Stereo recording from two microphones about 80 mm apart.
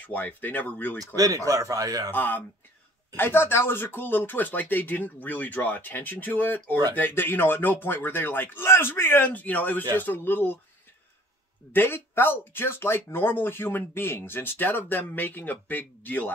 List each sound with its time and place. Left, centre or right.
0.0 s speech: left
0.9 s speech: right
2.0 s speech: left
11.7 s speech: left